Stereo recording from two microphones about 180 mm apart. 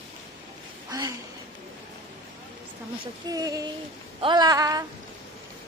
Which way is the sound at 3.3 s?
20° right (ahead or behind).